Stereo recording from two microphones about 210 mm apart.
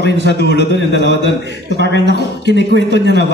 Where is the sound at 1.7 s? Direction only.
55° right (ahead or behind).